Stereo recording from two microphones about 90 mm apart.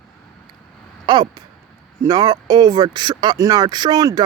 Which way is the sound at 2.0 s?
45° right (ahead or behind).